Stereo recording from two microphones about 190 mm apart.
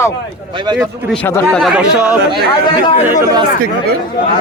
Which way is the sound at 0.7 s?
20° right (ahead or behind).